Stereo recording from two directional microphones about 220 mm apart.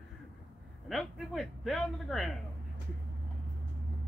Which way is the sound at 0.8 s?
Centre (ahead or behind).